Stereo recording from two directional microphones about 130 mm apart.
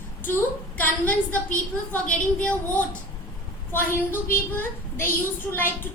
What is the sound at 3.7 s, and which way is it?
A woman's voice, 15° left (ahead or behind).